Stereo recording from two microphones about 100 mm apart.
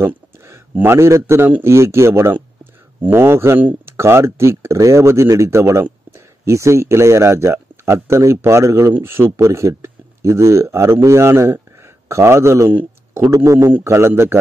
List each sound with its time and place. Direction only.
0.0 s a man's voice: 25° right (ahead or behind)